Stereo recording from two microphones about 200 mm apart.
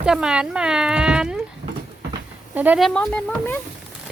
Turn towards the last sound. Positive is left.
turn(degrees=5)  # may be behind; listen again after turning